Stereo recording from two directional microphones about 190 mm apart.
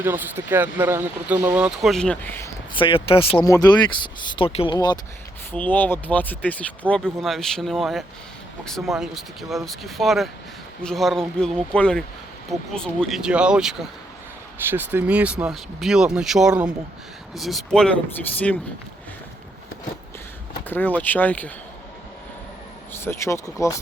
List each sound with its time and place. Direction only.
0.0 s speech: 10° right (ahead or behind); by 2.5 s 10° left (ahead or behind)
2.7 s speech: 30° left (ahead or behind)
5.5 s speech: 10° left (ahead or behind)
20.7 s speech: 10° left (ahead or behind)
22.9 s speech: 10° left (ahead or behind)